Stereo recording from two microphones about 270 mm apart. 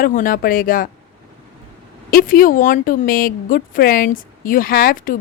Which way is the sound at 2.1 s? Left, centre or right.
Left.